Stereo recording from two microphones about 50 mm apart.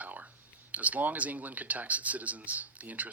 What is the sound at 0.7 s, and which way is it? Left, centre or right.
Speech, right.